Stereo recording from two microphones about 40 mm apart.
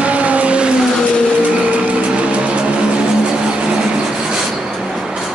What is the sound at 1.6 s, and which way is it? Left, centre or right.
Music, right.